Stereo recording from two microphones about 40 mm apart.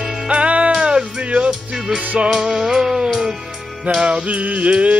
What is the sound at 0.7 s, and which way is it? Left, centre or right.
Music, centre.